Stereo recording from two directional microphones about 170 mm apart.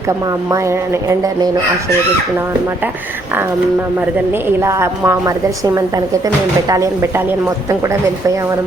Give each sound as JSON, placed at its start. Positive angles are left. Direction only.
{"t": 0.5, "sound": "speech", "side_deg": -20}
{"t": 4.4, "sound": "a woman's voice", "side_deg": -15}